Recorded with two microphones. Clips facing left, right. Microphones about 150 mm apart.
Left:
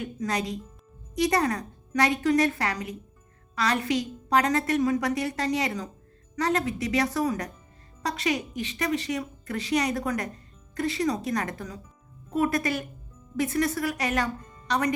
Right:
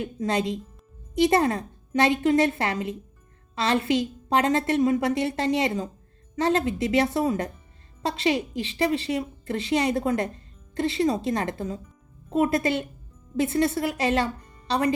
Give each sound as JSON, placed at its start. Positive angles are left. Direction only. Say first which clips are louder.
{"t": 0.0, "sound": "a woman's voice", "louder": "right 4 dB", "side_deg": -25}